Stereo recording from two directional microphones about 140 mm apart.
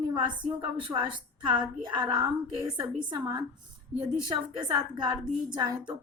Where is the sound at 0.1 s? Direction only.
35° right (ahead or behind).